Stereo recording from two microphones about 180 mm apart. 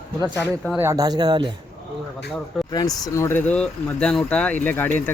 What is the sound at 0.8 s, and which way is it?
Speech, 15° right (ahead or behind).